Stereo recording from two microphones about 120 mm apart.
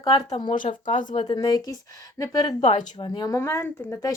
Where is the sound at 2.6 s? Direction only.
45° left (ahead or behind).